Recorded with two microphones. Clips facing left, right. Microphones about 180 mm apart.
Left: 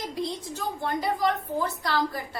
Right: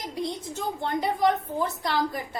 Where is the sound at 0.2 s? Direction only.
25° right (ahead or behind).